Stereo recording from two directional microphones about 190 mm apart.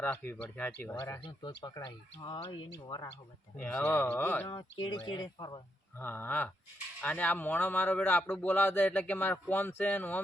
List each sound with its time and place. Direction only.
0.0 s speech: 10° left (ahead or behind)
3.6 s speech: 10° left (ahead or behind)
4.4 s speech: 20° left (ahead or behind)
6.0 s speech: 10° left (ahead or behind)